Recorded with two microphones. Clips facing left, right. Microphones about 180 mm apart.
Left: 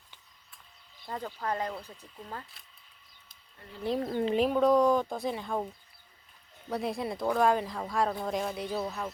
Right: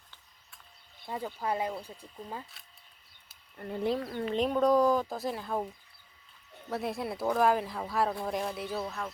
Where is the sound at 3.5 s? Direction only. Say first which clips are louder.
Right 12 dB; 55° right (ahead or behind).